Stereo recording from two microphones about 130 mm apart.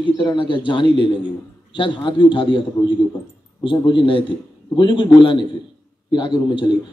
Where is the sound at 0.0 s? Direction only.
35° left (ahead or behind).